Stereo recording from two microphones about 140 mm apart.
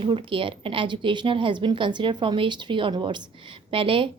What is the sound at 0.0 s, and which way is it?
A woman's voice, 40° right (ahead or behind).